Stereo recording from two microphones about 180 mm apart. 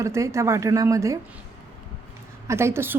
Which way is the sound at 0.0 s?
15° right (ahead or behind).